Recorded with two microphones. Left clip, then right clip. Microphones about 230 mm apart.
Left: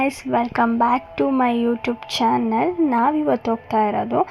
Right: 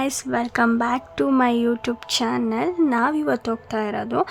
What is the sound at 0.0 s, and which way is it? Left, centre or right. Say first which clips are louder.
Speech: left 3 dB; centre.